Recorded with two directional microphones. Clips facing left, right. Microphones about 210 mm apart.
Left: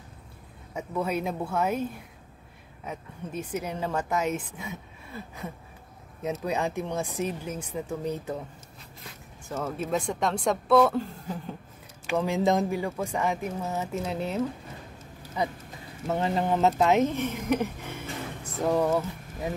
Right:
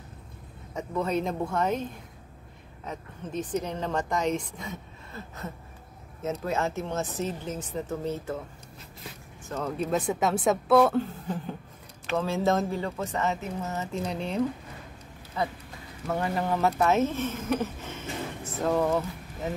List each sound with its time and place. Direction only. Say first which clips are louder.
0.7 s a woman's voice: right 1 dB; 10° left (ahead or behind)
9.5 s a woman's voice: right 1 dB; 5° left (ahead or behind)
12.1 s a woman's voice: left 1 dB; 15° left (ahead or behind)
15.4 s a woman's voice: left 1 dB; 15° left (ahead or behind)